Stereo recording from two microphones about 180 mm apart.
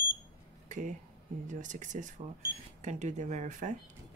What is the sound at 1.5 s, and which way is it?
Speech, 45° right (ahead or behind).